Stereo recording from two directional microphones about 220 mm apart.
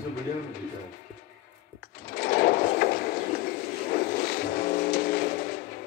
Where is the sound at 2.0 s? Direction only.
45° left (ahead or behind).